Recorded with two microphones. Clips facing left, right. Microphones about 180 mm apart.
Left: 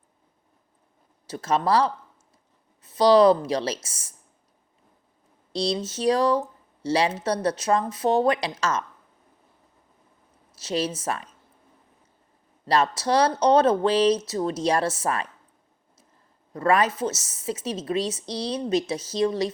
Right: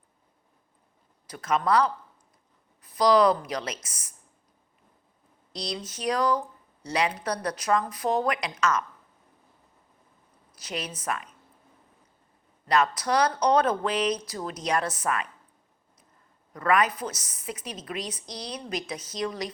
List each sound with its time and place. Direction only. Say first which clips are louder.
1.3 s speech: left 2 dB; 30° left (ahead or behind)
5.5 s speech: left 9 dB; 25° left (ahead or behind)
10.5 s speech: left 8 dB; 25° left (ahead or behind)
12.6 s speech: left 2 dB; 30° left (ahead or behind)
16.5 s speech: left 3 dB; 30° left (ahead or behind)